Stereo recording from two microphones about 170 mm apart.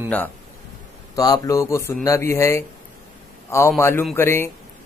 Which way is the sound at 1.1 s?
20° left (ahead or behind).